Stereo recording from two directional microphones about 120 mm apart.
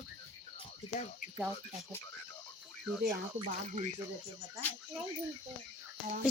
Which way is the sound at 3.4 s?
65° right (ahead or behind).